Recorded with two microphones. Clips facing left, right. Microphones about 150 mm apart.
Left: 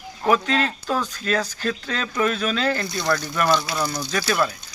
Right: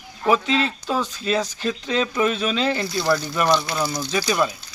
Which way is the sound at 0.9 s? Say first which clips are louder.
Right 1 dB; 10° right (ahead or behind).